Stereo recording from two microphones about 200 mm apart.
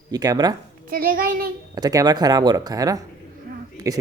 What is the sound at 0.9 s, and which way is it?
Speech, 45° right (ahead or behind).